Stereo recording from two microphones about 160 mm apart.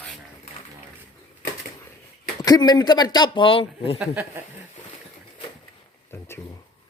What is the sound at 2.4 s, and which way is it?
Speech, 25° left (ahead or behind).